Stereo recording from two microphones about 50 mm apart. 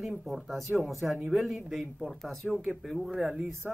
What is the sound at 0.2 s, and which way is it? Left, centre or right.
Speech, centre.